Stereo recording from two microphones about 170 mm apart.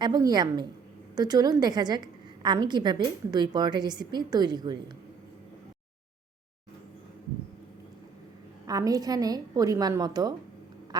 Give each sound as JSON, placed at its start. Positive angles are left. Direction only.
{"t": 0.0, "sound": "a woman's voice", "side_deg": -25}
{"t": 8.6, "sound": "a woman's voice", "side_deg": -20}